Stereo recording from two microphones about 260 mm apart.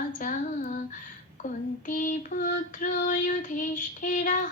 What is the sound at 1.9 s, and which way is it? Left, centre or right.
Child singing, left.